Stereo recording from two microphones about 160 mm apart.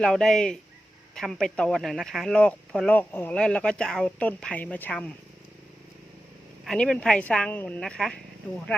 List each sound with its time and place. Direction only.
0.0 s speech: 5° left (ahead or behind)
6.7 s speech: 5° left (ahead or behind)